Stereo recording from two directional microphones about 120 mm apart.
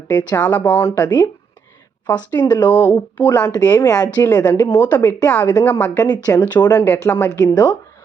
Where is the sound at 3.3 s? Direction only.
30° left (ahead or behind).